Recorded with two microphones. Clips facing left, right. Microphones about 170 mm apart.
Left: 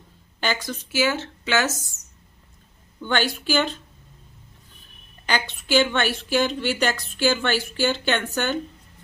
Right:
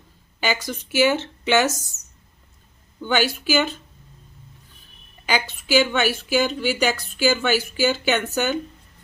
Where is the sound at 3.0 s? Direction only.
5° right (ahead or behind).